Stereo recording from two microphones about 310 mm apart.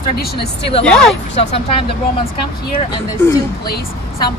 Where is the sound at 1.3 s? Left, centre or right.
Centre.